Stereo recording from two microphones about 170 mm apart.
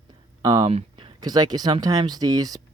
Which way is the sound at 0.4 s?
20° right (ahead or behind).